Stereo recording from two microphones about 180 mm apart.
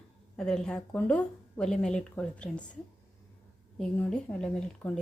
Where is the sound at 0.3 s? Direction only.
5° left (ahead or behind).